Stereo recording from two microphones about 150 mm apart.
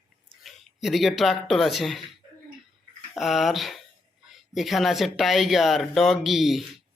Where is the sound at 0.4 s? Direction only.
Centre (ahead or behind).